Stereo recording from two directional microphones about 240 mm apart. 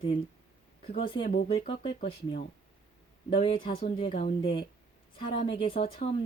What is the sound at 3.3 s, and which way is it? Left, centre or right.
Speech, left.